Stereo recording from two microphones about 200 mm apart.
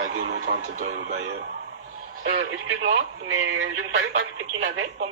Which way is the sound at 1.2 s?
55° right (ahead or behind).